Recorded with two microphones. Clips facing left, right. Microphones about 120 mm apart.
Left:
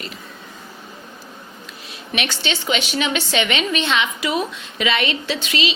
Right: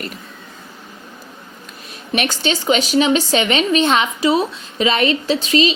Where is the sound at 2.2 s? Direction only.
40° right (ahead or behind).